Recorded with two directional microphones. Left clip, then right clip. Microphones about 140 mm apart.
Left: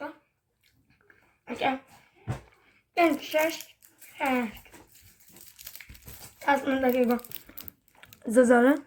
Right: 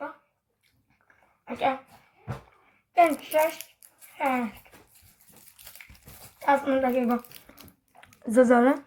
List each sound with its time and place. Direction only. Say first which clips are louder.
1.5 s cough: right 2 dB; 10° left (ahead or behind)
2.6 s a child's voice: right 3 dB; 25° left (ahead or behind)
5.5 s dog: left 1 dB; 20° left (ahead or behind)
6.4 s a sound: right 2 dB; 20° left (ahead or behind)